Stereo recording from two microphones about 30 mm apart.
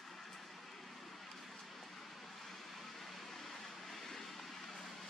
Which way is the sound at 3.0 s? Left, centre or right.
Centre.